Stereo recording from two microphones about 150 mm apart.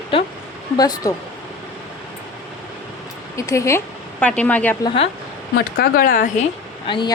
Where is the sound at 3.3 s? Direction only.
20° left (ahead or behind).